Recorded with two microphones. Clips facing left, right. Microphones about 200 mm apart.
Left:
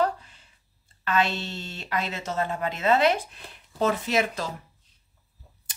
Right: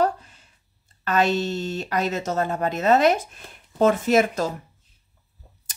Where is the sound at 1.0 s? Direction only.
45° right (ahead or behind).